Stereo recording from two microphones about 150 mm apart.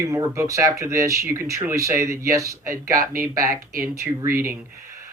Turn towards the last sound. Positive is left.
turn(degrees=-20)  # may be behind; listen again after turning